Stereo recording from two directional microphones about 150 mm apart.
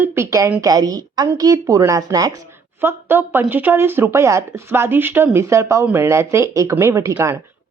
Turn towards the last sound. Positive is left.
turn(degrees=-15)  # may be behind; listen again after turning